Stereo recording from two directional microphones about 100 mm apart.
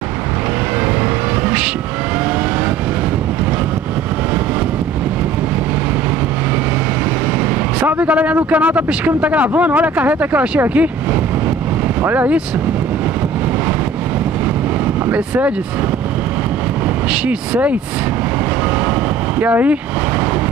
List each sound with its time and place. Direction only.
7.8 s speech: 15° right (ahead or behind)
12.0 s speech: 20° right (ahead or behind)
15.0 s speech: 15° right (ahead or behind)
17.1 s speech: 15° right (ahead or behind)
19.4 s speech: 15° right (ahead or behind)